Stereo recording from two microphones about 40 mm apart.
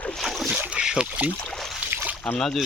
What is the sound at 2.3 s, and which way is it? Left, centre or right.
Speech, centre.